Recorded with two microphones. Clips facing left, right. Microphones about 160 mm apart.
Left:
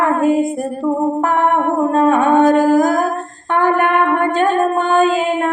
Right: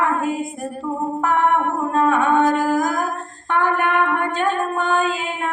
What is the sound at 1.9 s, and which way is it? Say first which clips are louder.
Humming: left 4 dB; 45° left (ahead or behind).